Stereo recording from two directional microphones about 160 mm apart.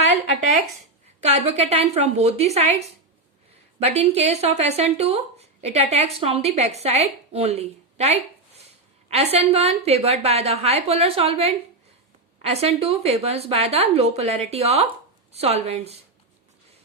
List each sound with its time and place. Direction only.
1.2 s speech: 40° right (ahead or behind)
3.8 s speech: 40° right (ahead or behind)